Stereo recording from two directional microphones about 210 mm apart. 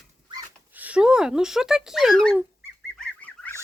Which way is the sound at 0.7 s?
5° right (ahead or behind).